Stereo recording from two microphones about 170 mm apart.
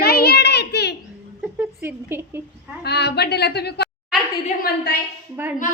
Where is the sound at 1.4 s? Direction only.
10° right (ahead or behind).